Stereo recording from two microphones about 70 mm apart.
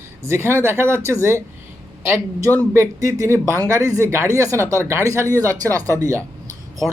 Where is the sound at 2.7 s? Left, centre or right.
Right.